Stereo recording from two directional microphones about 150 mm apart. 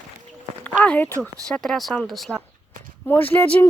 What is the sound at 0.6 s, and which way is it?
Speech, 10° left (ahead or behind).